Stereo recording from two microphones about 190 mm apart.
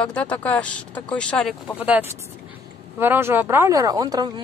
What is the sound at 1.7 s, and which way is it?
Speech, 5° right (ahead or behind).